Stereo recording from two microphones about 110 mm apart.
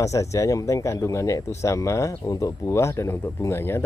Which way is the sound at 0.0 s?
30° left (ahead or behind).